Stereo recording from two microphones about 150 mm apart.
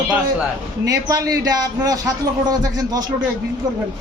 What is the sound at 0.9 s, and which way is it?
A man's voice, 20° right (ahead or behind).